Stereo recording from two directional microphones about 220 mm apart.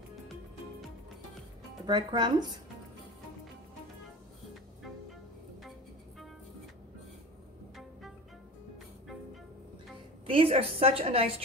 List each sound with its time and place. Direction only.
1.9 s a woman's voice: 20° right (ahead or behind)
9.0 s music: centre (ahead or behind)
10.2 s a woman's voice: 25° right (ahead or behind)